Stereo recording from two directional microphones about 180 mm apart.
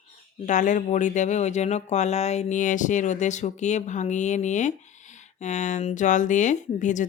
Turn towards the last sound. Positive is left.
turn(degrees=45)  # may be behind; listen again after turning